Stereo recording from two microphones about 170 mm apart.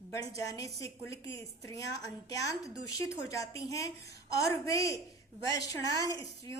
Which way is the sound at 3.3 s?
20° left (ahead or behind).